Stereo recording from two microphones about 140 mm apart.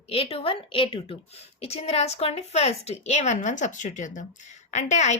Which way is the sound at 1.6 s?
50° left (ahead or behind).